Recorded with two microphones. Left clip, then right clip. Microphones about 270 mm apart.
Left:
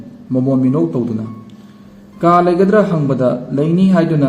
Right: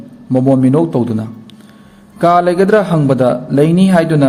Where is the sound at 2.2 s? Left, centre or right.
Right.